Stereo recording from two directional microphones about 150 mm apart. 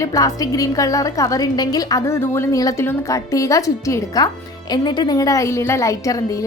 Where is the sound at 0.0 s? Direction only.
25° left (ahead or behind).